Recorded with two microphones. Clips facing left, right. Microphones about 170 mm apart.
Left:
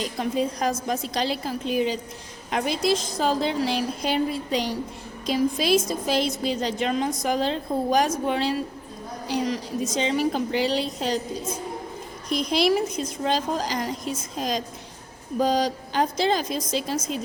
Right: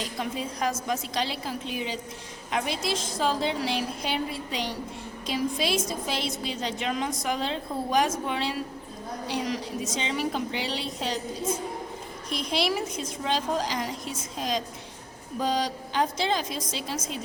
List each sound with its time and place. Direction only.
0.2 s a woman's voice: 40° left (ahead or behind)
12.3 s a woman's voice: 40° left (ahead or behind)